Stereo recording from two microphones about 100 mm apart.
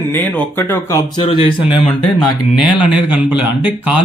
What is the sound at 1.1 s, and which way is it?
Speech, 55° left (ahead or behind).